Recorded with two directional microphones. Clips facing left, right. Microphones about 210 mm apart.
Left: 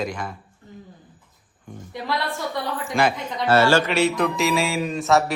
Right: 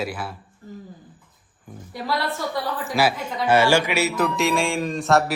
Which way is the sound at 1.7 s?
5° right (ahead or behind).